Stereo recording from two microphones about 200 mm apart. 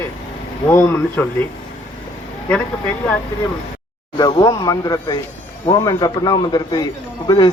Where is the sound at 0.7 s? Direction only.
15° left (ahead or behind).